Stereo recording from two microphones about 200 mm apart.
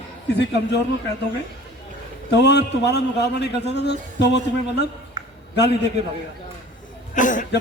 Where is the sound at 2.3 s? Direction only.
60° left (ahead or behind).